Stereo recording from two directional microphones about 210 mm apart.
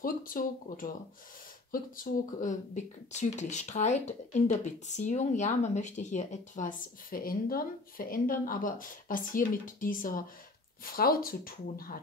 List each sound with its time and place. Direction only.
0.0 s speech: 40° left (ahead or behind)